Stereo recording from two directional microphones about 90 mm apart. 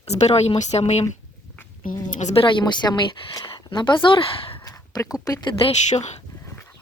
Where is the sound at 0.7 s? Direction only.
90° left.